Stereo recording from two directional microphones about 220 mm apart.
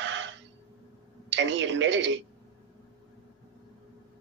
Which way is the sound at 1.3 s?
55° right (ahead or behind).